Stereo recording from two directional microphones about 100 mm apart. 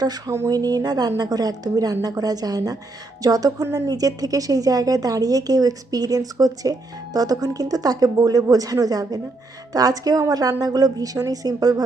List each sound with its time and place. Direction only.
0.0 s a woman's voice: 40° right (ahead or behind)